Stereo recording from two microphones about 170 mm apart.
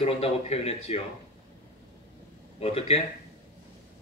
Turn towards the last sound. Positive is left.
turn(degrees=35)  # may be behind; listen again after turning